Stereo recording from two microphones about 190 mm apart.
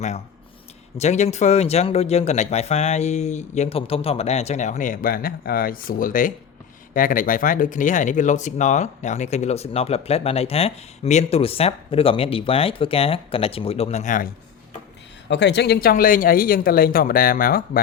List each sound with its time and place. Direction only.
0.9 s speech: 35° left (ahead or behind)
15.3 s speech: 65° left (ahead or behind); by 17.6 s 50° left (ahead or behind)